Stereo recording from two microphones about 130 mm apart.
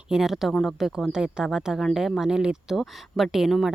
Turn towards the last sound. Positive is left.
turn(degrees=0)  # may be behind; listen again after turning